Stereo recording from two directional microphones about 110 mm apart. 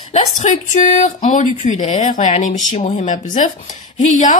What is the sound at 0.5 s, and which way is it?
Speech, 90° left.